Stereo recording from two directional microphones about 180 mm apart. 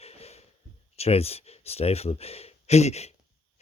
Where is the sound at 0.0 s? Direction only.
35° left (ahead or behind).